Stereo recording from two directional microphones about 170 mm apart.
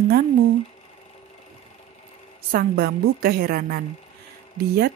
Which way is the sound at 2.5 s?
65° right (ahead or behind).